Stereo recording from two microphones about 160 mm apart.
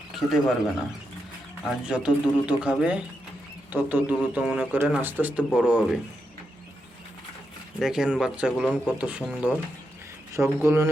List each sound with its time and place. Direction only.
0.2 s speech: centre (ahead or behind)
1.6 s speech: 5° right (ahead or behind)
7.8 s speech: 5° right (ahead or behind)